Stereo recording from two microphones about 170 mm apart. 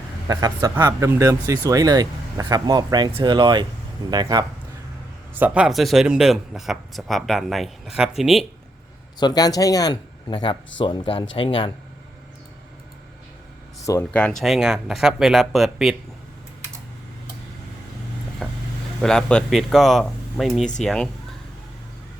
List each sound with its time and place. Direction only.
0.3 s speech: 20° right (ahead or behind)
5.4 s speech: 5° right (ahead or behind)
9.1 s a man's voice: 25° left (ahead or behind)
13.8 s speech: 15° left (ahead or behind)
18.4 s speech: 5° right (ahead or behind)